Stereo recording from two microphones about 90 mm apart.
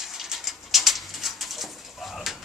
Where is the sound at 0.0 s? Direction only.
5° right (ahead or behind).